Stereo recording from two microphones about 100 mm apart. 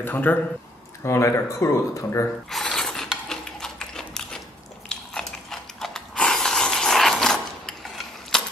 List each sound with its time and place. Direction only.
0.0 s speech: 20° left (ahead or behind)
1.0 s speech: 30° left (ahead or behind)
2.5 s a sound: 5° left (ahead or behind)